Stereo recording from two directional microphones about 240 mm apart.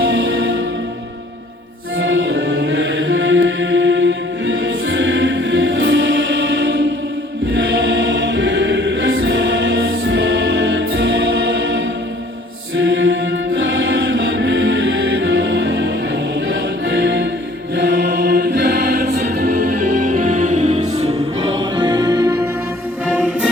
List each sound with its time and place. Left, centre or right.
2.0 s music: right
7.5 s choir: right
12.8 s mantra: right
13.6 s music: right
17.7 s choir: right
20.1 s music: right; by 22.4 s centre